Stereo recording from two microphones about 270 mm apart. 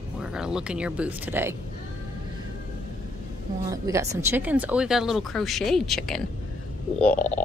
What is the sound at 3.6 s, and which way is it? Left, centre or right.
Speech, centre.